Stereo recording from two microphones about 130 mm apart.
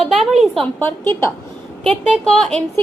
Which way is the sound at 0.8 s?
20° left (ahead or behind).